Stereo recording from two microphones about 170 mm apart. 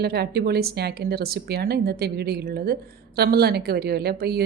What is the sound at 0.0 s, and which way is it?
A woman's voice, 70° right (ahead or behind).